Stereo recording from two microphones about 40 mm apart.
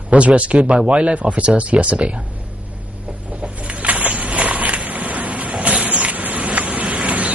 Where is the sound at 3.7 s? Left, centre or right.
Right.